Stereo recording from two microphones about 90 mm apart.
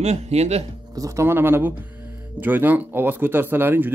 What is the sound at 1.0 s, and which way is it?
Speech, 35° right (ahead or behind).